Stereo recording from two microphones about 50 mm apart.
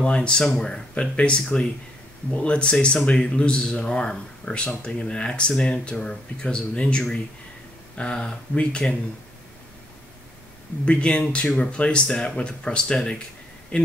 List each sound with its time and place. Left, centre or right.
0.0 s speech: centre
10.9 s speech: left